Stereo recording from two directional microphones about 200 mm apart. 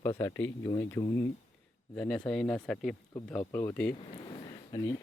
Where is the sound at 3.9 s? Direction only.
30° left (ahead or behind).